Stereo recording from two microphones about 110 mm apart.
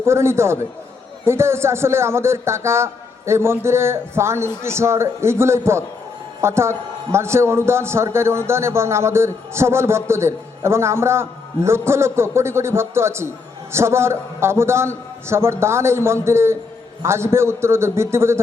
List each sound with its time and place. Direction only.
0.0 s a man's voice: 25° right (ahead or behind)